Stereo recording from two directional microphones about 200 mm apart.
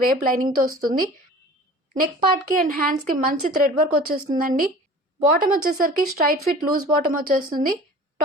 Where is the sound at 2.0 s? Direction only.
45° right (ahead or behind).